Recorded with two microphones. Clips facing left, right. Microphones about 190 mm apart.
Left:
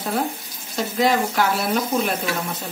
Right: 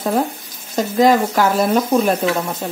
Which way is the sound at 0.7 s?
45° right (ahead or behind).